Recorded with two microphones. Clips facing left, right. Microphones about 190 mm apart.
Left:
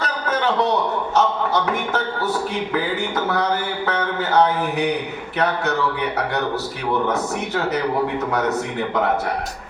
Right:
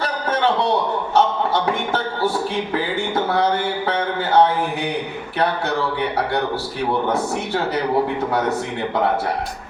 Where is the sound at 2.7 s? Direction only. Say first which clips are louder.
Right 1 dB; 30° right (ahead or behind).